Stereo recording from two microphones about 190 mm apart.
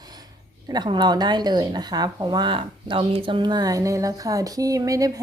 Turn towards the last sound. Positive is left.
turn(degrees=-20)  # may be behind; listen again after turning